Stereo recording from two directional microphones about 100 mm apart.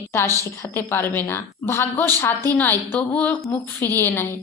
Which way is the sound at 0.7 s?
25° left (ahead or behind).